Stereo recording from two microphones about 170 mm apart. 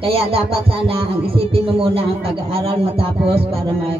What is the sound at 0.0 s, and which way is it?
Speech, 35° right (ahead or behind).